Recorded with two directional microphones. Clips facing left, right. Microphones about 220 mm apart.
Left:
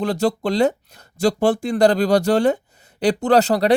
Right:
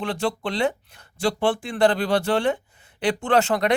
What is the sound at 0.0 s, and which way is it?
Speech, 40° left (ahead or behind).